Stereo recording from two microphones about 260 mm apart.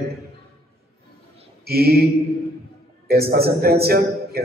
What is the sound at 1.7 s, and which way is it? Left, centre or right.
Speech, right.